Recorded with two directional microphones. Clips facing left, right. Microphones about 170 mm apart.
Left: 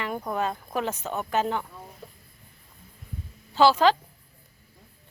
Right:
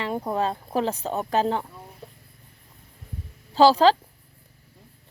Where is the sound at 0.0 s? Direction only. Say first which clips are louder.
Right 3 dB; 30° right (ahead or behind).